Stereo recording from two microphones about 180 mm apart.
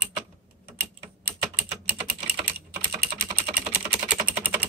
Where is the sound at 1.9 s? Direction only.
10° right (ahead or behind).